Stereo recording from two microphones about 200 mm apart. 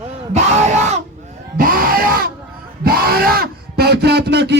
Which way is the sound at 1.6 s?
45° right (ahead or behind).